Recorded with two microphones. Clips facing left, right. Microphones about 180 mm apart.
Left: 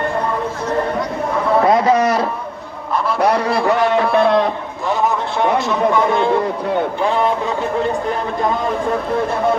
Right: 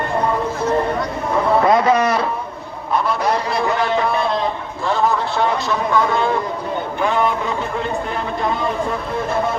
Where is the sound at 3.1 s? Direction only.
65° left (ahead or behind).